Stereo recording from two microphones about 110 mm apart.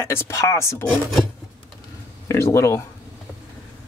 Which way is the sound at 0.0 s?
25° left (ahead or behind).